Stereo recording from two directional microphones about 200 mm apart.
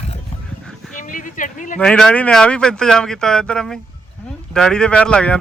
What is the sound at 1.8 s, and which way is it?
Speech, 5° left (ahead or behind).